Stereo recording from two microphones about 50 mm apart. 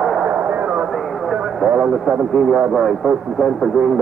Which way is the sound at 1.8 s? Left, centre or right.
Centre.